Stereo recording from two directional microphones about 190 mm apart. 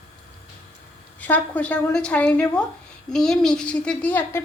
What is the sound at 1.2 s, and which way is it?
A woman's voice, 10° left (ahead or behind).